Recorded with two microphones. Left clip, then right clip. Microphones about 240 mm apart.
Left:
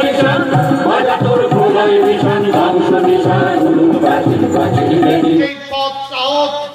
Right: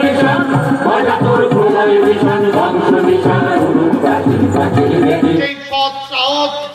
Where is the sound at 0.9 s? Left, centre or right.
Left.